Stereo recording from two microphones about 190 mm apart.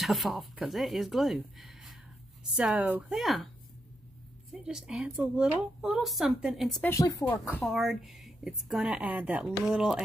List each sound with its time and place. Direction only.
0.0 s a woman's voice: centre (ahead or behind)
4.5 s a woman's voice: 5° right (ahead or behind)
6.9 s speech: 15° left (ahead or behind)
7.6 s a woman's voice: centre (ahead or behind)